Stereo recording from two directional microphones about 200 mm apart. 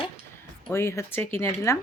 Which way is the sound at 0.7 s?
15° left (ahead or behind).